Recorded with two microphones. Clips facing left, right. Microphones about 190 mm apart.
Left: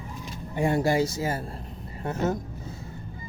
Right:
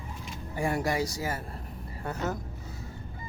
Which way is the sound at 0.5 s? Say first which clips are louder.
Left 5 dB; 25° left (ahead or behind).